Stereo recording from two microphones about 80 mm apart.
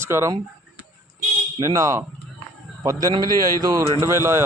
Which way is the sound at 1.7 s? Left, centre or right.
Right.